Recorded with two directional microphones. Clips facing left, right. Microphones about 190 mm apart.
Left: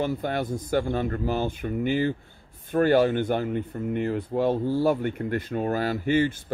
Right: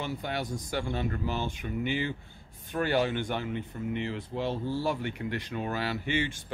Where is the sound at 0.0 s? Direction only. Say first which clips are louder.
Left 7 dB; 45° left (ahead or behind).